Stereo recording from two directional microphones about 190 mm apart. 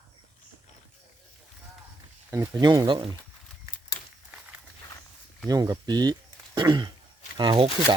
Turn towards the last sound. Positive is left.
turn(degrees=-25)  # may be behind; listen again after turning